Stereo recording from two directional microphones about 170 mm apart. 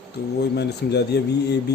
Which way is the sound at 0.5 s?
75° left (ahead or behind).